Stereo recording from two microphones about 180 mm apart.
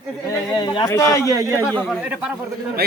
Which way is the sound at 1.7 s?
5° left (ahead or behind).